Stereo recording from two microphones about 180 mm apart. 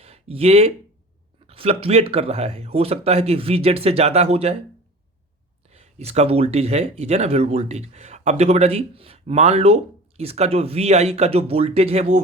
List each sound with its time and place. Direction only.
0.0 s a sound: 35° right (ahead or behind)
1.5 s speech: 35° right (ahead or behind)
5.7 s speech: 35° right (ahead or behind)